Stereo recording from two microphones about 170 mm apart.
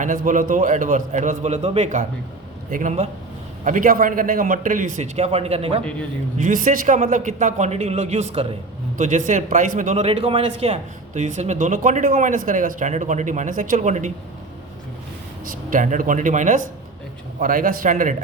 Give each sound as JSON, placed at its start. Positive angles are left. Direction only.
{"t": 0.0, "sound": "a man's voice", "side_deg": -50}
{"t": 6.4, "sound": "a man's voice", "side_deg": -50}
{"t": 9.0, "sound": "a man's voice", "side_deg": -45}
{"t": 15.7, "sound": "a man's voice", "side_deg": -50}